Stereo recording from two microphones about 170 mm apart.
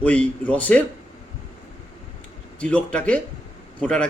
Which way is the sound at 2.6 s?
5° left (ahead or behind).